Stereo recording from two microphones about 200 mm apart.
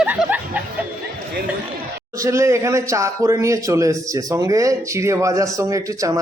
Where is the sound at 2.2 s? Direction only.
15° right (ahead or behind).